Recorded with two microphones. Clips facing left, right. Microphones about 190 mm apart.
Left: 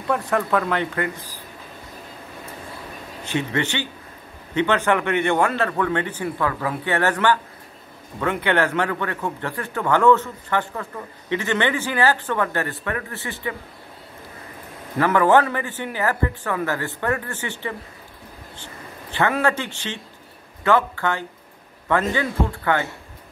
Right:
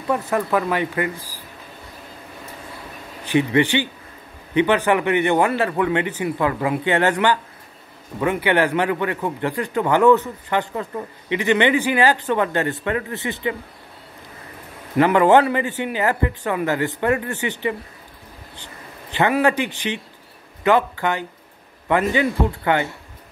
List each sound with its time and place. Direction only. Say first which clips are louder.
0.1 s speech: right 1 dB; 5° right (ahead or behind)
3.3 s speech: right 7 dB; 10° right (ahead or behind)
15.0 s speech: right 3 dB; 20° right (ahead or behind)
19.1 s speech: right 3 dB; 15° right (ahead or behind)